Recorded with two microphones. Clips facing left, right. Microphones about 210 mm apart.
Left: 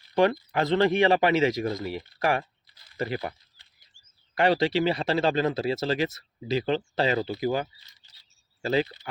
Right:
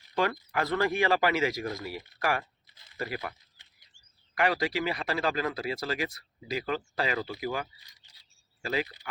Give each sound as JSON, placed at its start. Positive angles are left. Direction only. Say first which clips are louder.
{"t": 0.5, "sound": "speech", "louder": "left 6 dB", "side_deg": 25}
{"t": 2.7, "sound": "a sound", "louder": "even", "side_deg": -20}
{"t": 3.0, "sound": "speech", "louder": "left 5 dB", "side_deg": 25}
{"t": 4.4, "sound": "speech", "louder": "left 6 dB", "side_deg": 25}